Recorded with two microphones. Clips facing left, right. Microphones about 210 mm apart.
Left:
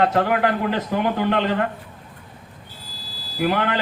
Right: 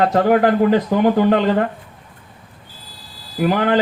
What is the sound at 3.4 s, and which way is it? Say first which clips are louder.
Speech: right 4 dB; 45° right (ahead or behind).